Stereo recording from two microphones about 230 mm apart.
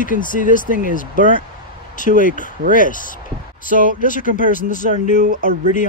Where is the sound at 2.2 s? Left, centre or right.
Left.